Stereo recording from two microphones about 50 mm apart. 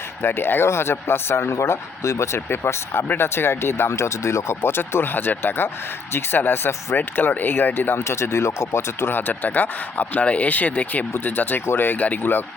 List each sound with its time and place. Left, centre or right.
0.2 s speech: left
8.0 s speech: left
11.9 s speech: left